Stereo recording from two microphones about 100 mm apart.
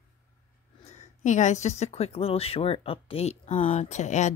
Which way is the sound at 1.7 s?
90° left.